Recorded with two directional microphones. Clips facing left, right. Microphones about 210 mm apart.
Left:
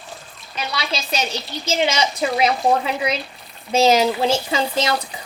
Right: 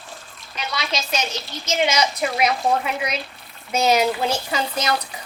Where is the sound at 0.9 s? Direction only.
35° left (ahead or behind).